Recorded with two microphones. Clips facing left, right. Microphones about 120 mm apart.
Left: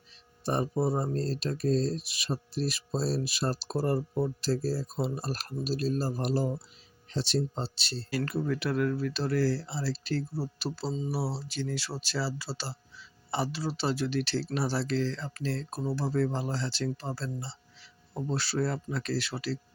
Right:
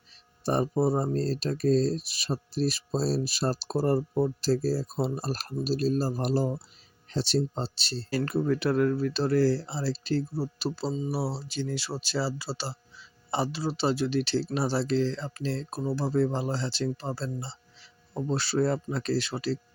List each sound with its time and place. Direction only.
0.4 s speech: 35° right (ahead or behind)